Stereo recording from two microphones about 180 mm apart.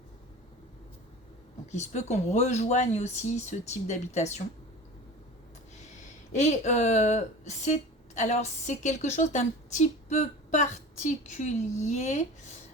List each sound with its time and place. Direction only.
1.7 s speech: 40° left (ahead or behind)
6.3 s speech: 40° left (ahead or behind)